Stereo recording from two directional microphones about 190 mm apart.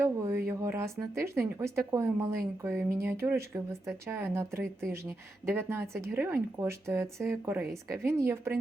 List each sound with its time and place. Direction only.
0.0 s a woman's voice: 10° right (ahead or behind)